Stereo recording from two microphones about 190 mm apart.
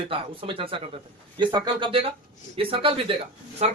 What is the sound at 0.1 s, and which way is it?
A man's voice, 25° right (ahead or behind).